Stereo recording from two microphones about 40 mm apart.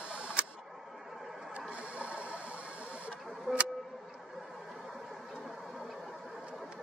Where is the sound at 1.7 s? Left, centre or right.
Right.